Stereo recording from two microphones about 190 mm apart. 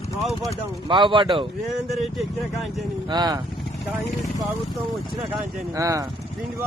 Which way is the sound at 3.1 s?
20° right (ahead or behind).